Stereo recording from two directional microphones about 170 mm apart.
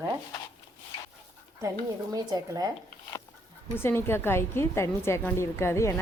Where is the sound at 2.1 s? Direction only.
20° right (ahead or behind).